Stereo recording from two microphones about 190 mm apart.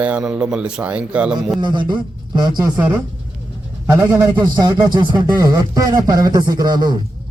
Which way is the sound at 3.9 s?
20° right (ahead or behind).